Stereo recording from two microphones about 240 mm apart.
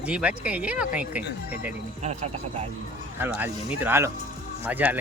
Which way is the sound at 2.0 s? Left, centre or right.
Right.